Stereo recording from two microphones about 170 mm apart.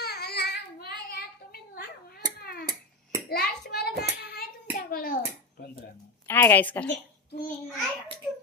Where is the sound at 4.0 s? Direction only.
60° left (ahead or behind).